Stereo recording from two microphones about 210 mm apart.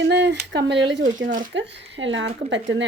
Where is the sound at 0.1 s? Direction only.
55° right (ahead or behind).